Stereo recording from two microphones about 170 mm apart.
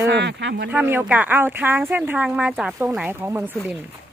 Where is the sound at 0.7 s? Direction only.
10° right (ahead or behind).